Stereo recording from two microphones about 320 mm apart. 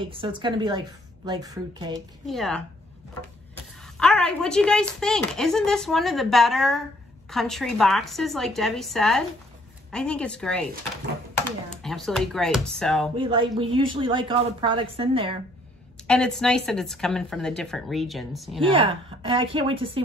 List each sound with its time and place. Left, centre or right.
0.0 s a woman's voice: centre
2.2 s speech: centre
3.8 s speech: centre
13.2 s a woman's voice: centre
16.1 s speech: centre
18.7 s a woman's voice: centre